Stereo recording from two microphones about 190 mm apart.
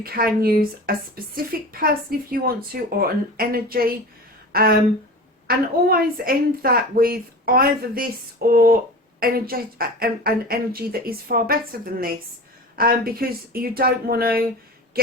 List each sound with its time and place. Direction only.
0.0 s speech: 50° right (ahead or behind)